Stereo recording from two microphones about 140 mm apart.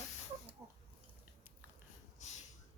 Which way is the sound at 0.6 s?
15° right (ahead or behind).